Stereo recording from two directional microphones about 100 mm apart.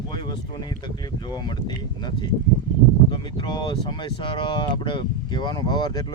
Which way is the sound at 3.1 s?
50° left (ahead or behind).